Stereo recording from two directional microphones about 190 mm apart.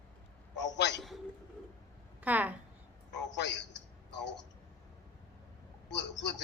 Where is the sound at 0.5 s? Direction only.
65° left (ahead or behind).